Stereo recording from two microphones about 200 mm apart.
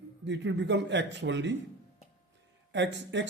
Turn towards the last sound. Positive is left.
turn(degrees=-65)  # may be behind; listen again after turning